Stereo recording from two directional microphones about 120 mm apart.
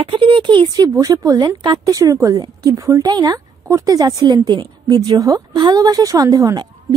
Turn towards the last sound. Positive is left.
turn(degrees=-35)  # may be behind; listen again after turning